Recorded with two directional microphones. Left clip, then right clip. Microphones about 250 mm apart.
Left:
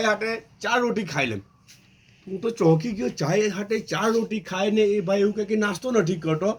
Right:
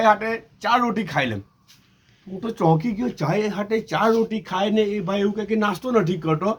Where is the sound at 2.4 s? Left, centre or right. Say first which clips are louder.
Even; centre.